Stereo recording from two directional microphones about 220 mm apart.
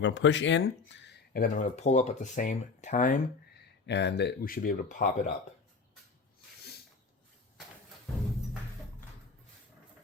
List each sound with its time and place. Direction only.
0.0 s speech: 55° left (ahead or behind); by 3.2 s 35° left (ahead or behind)
3.8 s speech: 50° left (ahead or behind)